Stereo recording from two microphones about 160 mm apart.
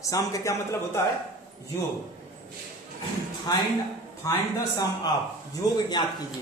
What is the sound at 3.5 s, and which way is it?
A man's voice, 25° left (ahead or behind).